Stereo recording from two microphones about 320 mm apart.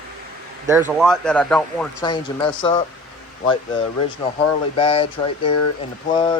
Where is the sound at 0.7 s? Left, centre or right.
Centre.